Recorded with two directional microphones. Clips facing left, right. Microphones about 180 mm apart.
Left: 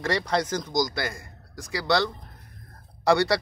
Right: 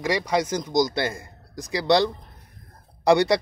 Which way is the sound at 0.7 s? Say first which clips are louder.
Right 6 dB; 25° right (ahead or behind).